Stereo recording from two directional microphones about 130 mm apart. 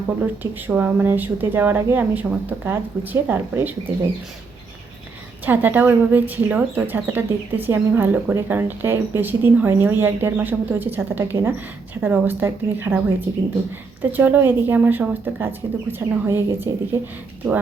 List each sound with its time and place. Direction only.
0.7 s speech: 10° right (ahead or behind)
5.5 s speech: 15° right (ahead or behind)
14.0 s speech: 15° right (ahead or behind)